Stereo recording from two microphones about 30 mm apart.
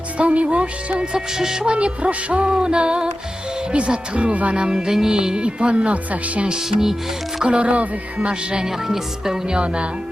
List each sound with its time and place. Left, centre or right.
0.2 s speech: right
0.4 s music: right
1.4 s music: centre
1.6 s music: right
2.6 s speech: right
3.7 s music: right
4.2 s speech: right
4.5 s music: right
4.9 s music: centre
5.1 s music: right
6.7 s music: centre
7.4 s music: right
8.3 s music: right
8.6 s speech: centre